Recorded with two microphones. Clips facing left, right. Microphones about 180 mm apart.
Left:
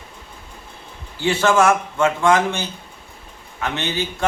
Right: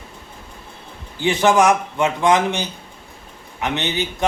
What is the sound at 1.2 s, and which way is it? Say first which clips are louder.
A man's voice: right 1 dB; 15° right (ahead or behind).